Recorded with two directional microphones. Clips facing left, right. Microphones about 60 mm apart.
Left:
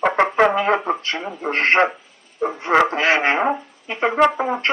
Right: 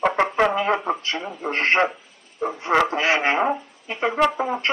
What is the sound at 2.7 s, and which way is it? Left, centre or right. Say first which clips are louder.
Speech: left 3 dB; centre.